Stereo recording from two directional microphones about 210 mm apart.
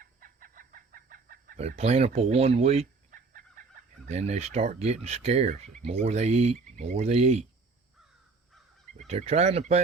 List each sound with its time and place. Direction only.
0.0 s chicken: 40° right (ahead or behind)
5.8 s speech: 30° right (ahead or behind)
9.0 s speech: 30° right (ahead or behind)